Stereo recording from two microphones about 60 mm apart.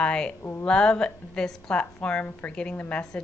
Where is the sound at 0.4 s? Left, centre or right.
Left.